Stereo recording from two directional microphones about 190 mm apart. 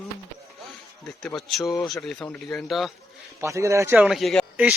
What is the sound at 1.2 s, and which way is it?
Speech, centre (ahead or behind).